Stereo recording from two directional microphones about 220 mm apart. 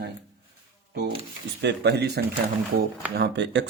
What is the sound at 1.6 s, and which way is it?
Speech, 50° right (ahead or behind).